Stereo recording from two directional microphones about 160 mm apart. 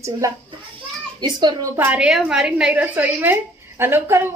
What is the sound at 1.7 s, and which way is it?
A woman's voice, 10° right (ahead or behind).